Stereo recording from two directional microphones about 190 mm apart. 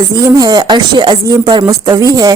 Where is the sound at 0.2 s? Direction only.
20° right (ahead or behind).